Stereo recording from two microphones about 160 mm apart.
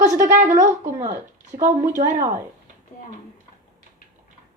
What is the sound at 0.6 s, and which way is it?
Speech, 50° right (ahead or behind).